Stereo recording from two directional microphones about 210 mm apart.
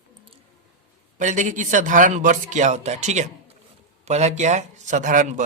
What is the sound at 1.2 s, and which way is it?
A man's voice, 35° right (ahead or behind).